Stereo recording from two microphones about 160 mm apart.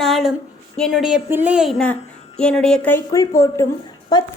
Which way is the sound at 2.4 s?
5° left (ahead or behind).